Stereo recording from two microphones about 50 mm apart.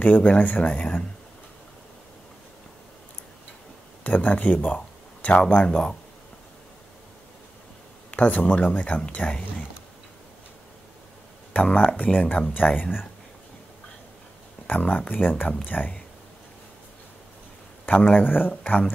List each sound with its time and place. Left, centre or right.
0.0 s speech: left
4.0 s speech: left
8.1 s speech: left
11.5 s speech: left
14.7 s speech: left
17.8 s speech: left